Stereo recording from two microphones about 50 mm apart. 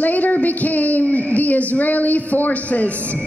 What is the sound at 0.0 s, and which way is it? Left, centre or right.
A woman's voice, left.